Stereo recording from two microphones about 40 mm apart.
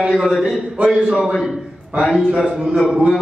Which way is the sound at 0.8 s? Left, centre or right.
Right.